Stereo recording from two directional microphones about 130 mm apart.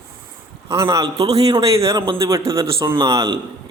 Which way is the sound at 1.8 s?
25° right (ahead or behind).